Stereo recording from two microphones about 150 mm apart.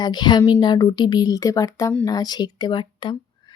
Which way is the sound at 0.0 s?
30° left (ahead or behind).